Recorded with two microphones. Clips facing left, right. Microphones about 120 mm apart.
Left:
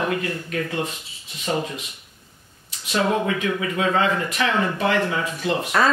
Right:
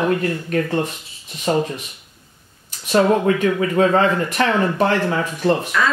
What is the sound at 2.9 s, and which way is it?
Speech, 40° right (ahead or behind).